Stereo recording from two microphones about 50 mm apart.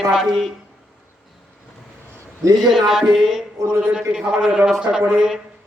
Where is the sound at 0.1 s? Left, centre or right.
Centre.